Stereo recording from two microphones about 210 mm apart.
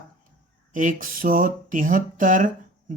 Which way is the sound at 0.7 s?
40° right (ahead or behind).